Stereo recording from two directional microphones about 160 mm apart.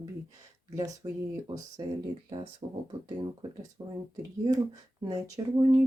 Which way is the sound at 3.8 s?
20° right (ahead or behind).